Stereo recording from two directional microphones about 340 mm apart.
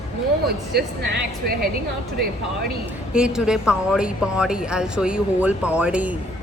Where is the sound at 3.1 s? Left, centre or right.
Centre.